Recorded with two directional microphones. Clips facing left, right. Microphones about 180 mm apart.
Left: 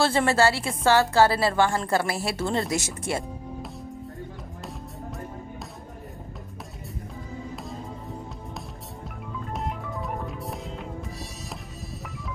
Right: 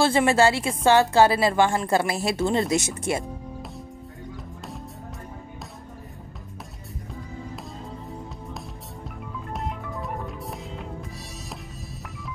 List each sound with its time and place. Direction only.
0.0 s a woman's voice: 15° right (ahead or behind)
9.5 s music: centre (ahead or behind)